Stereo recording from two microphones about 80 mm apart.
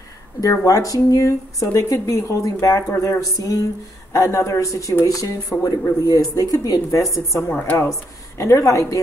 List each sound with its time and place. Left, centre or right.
0.4 s speech: left
7.5 s speech: left
8.4 s speech: left